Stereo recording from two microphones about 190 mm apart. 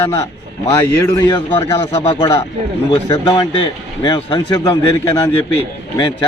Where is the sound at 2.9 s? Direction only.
20° left (ahead or behind).